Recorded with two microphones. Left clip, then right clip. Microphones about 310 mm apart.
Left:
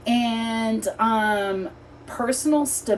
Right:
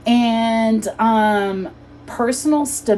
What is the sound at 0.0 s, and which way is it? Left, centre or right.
A woman's voice, right.